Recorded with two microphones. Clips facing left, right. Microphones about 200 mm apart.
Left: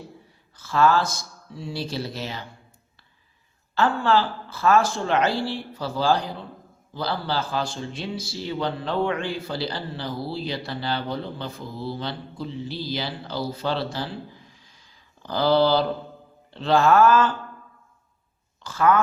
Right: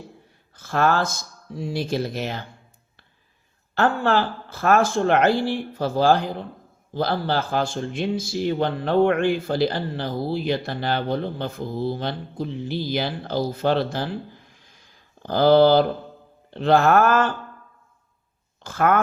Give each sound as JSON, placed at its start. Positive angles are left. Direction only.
{"t": 0.5, "sound": "speech", "side_deg": -55}
{"t": 3.8, "sound": "speech", "side_deg": -55}
{"t": 18.6, "sound": "speech", "side_deg": -55}